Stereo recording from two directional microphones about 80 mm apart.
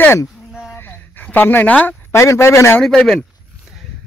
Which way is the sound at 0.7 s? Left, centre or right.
Left.